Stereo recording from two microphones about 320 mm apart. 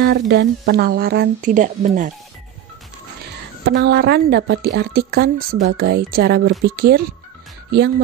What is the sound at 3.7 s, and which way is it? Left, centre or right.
Speech, right.